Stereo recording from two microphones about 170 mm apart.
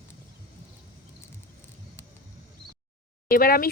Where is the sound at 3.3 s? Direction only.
60° left (ahead or behind).